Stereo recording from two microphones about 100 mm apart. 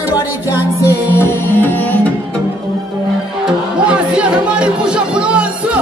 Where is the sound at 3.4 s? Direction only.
10° right (ahead or behind).